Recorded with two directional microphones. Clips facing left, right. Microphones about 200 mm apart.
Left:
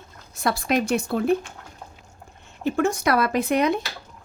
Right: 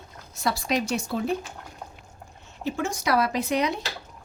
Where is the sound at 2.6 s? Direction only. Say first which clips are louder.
Left 6 dB; 55° left (ahead or behind).